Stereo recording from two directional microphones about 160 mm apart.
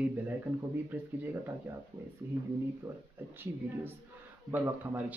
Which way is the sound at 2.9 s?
15° right (ahead or behind).